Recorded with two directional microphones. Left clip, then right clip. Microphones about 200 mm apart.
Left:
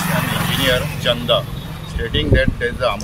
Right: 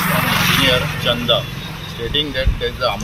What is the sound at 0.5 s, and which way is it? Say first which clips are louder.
Speech: right 2 dB; 30° left (ahead or behind).